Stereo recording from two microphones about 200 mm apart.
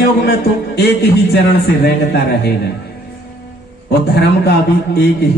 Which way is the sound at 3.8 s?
55° left (ahead or behind).